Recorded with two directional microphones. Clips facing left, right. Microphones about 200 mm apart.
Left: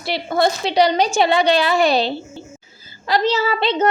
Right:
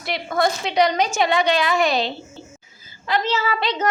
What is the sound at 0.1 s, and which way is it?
A child's voice, 30° left (ahead or behind).